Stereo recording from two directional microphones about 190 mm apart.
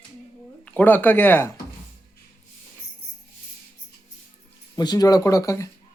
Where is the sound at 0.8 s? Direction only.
10° left (ahead or behind).